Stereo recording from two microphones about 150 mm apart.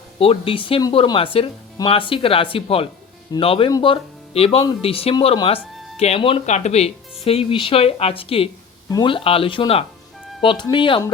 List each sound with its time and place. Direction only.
0.2 s speech: 40° left (ahead or behind)
6.4 s speech: 50° left (ahead or behind); by 11.0 s 35° left (ahead or behind)